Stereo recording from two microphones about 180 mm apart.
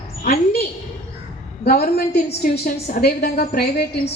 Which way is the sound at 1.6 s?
55° left (ahead or behind).